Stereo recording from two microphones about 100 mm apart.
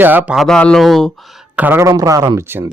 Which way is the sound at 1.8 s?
35° right (ahead or behind).